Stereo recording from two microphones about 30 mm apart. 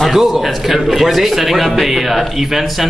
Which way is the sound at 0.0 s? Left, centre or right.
Centre.